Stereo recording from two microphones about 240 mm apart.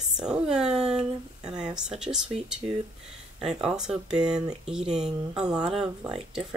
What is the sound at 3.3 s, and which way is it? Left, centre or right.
Speech, centre.